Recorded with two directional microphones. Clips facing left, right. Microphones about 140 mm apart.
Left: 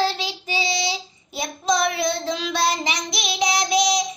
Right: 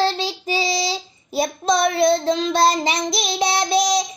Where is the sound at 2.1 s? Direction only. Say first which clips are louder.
Right 7 dB; 30° right (ahead or behind).